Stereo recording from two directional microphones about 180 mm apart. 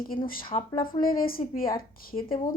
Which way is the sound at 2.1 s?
35° left (ahead or behind).